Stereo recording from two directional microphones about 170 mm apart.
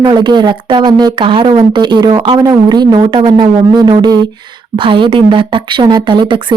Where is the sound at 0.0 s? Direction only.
25° right (ahead or behind).